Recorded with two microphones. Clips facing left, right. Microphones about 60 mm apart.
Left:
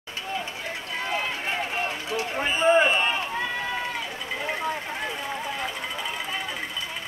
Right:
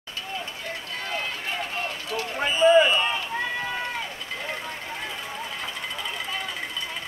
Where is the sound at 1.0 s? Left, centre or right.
Left.